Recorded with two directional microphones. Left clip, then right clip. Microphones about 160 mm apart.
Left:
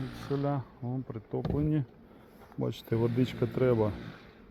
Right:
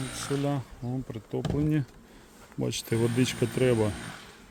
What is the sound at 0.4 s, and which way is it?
Speech, 20° right (ahead or behind).